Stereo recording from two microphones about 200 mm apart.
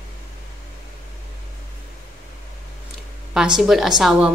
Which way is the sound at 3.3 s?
5° right (ahead or behind).